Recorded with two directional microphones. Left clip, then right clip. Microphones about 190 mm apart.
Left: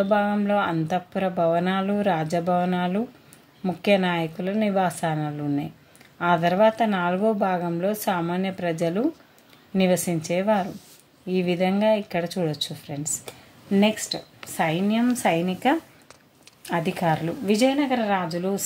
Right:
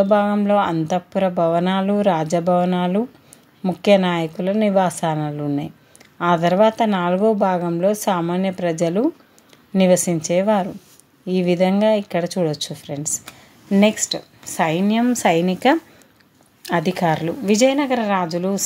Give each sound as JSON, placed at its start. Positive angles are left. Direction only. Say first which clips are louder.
{"t": 0.0, "sound": "speech", "louder": "right 5 dB", "side_deg": -30}